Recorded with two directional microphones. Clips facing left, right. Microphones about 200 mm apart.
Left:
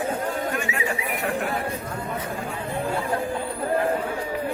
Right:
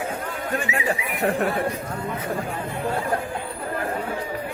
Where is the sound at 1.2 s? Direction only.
35° right (ahead or behind).